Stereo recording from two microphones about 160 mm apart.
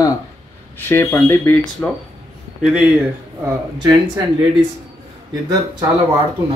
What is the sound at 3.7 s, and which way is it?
Speech, 25° right (ahead or behind).